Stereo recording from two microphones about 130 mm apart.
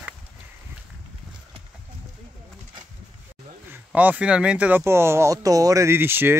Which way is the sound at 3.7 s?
10° right (ahead or behind).